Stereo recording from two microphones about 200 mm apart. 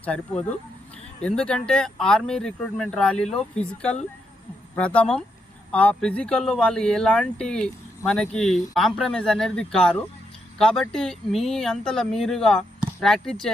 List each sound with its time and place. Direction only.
1.2 s speech: 5° left (ahead or behind)